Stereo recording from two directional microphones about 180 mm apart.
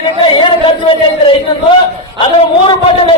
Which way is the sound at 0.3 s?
25° left (ahead or behind).